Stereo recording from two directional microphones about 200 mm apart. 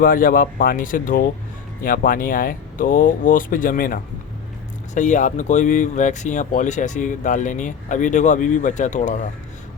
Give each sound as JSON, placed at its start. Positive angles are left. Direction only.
{"t": 0.0, "sound": "speech", "side_deg": 45}